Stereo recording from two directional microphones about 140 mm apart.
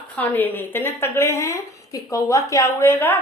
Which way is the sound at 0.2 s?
15° left (ahead or behind).